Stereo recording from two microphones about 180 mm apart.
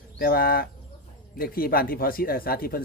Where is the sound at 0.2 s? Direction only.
55° left (ahead or behind).